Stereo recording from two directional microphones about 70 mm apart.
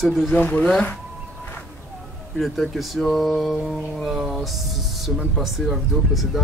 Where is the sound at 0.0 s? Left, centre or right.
Centre.